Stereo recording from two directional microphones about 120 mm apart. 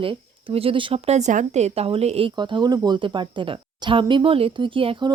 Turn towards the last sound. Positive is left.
turn(degrees=-45)  # may be behind; listen again after turning